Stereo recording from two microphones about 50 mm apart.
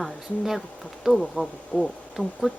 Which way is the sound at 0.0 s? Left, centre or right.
Centre.